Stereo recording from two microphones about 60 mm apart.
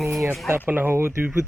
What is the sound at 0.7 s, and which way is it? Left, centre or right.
Speech, right.